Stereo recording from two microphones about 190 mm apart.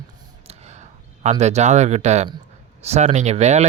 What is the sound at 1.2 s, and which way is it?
A man's voice, 35° right (ahead or behind).